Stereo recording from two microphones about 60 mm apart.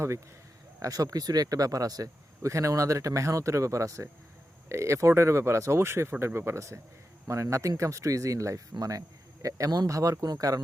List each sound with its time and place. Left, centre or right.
0.8 s speech: right
8.8 s speech: right